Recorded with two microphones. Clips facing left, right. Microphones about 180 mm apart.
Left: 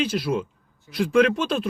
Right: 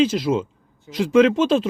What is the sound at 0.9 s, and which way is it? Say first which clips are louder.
Speech: right 2 dB; 90° right.